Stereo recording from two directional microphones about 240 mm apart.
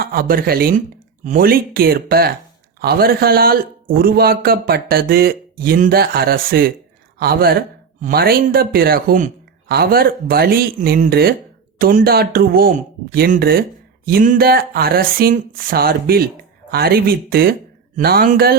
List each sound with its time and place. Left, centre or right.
0.0 s speech: right